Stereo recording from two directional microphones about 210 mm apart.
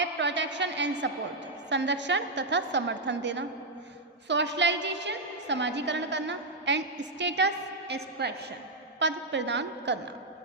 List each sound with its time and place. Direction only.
0.0 s a woman's voice: 55° right (ahead or behind)